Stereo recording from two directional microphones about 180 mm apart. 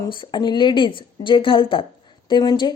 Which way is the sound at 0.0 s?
25° left (ahead or behind).